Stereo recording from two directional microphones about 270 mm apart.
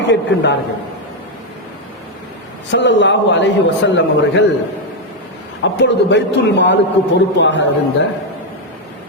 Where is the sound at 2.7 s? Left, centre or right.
Left.